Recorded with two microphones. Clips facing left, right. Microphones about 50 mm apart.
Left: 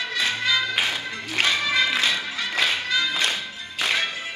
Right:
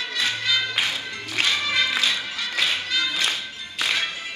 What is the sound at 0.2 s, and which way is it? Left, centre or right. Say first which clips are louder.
Music: left 1 dB; left.